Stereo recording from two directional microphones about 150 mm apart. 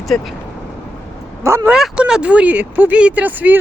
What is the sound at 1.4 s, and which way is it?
Speech, 20° right (ahead or behind).